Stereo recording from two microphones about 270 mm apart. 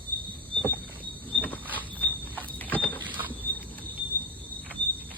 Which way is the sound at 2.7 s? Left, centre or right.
Centre.